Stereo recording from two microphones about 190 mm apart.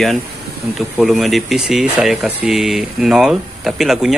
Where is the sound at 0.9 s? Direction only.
Centre (ahead or behind).